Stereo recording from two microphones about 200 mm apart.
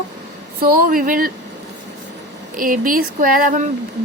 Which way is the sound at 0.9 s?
45° right (ahead or behind).